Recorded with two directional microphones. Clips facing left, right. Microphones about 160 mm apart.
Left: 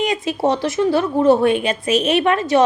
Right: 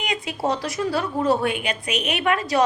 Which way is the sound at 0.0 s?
25° left (ahead or behind).